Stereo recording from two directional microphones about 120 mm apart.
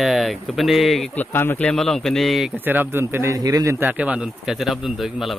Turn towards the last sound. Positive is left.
turn(degrees=-5)  # may be behind; listen again after turning